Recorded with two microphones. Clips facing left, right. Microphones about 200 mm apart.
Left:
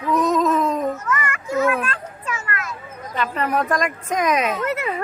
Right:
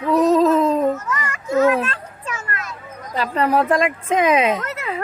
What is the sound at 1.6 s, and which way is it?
Children playing, 25° right (ahead or behind).